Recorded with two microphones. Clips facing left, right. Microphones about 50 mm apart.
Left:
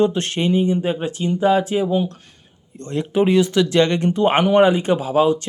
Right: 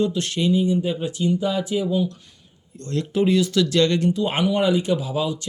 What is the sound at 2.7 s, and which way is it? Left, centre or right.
Speech, left.